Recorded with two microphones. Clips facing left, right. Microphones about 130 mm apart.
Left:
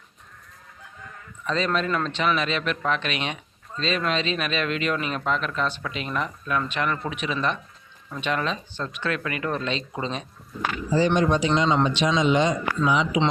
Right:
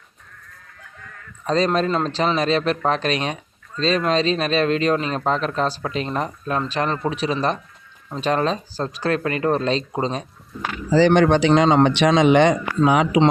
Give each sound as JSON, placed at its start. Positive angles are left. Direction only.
{"t": 1.5, "sound": "speech", "side_deg": -35}
{"t": 10.9, "sound": "speech", "side_deg": -80}